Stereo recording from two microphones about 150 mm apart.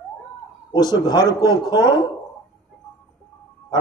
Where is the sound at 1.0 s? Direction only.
25° left (ahead or behind).